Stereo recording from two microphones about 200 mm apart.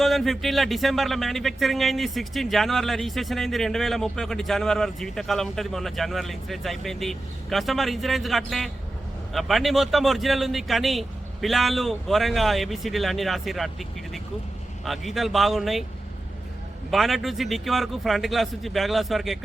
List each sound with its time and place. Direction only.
0.0 s speech: centre (ahead or behind)
14.8 s speech: centre (ahead or behind)
16.9 s speech: centre (ahead or behind)